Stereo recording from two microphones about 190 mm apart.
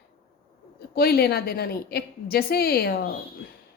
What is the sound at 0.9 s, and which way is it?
A woman's voice, 55° left (ahead or behind).